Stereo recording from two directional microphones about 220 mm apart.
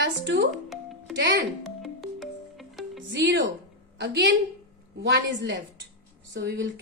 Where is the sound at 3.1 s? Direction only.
55° right (ahead or behind).